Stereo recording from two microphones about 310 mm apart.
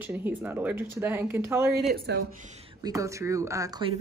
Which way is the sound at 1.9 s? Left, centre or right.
Right.